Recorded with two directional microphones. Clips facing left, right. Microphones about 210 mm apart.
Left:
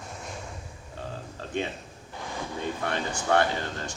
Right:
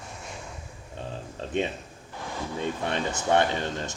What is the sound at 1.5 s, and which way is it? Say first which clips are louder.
Speech: right 3 dB; 20° right (ahead or behind).